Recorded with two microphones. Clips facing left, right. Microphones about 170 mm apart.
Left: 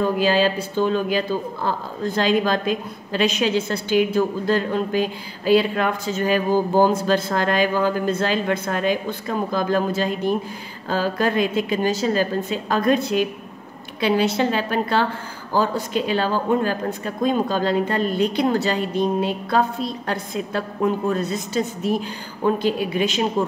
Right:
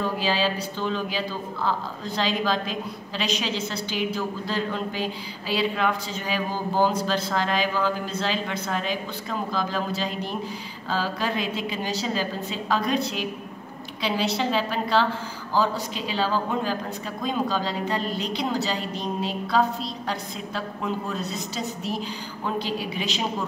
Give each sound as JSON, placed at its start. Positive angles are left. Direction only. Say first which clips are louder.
{"t": 0.0, "sound": "a woman's voice", "louder": "left 6 dB", "side_deg": 50}